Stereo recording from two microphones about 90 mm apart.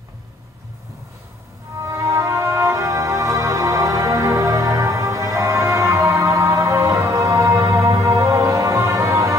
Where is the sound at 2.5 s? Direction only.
35° right (ahead or behind).